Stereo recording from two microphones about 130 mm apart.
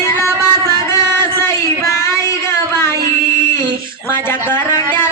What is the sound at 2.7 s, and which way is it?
Music, 20° left (ahead or behind).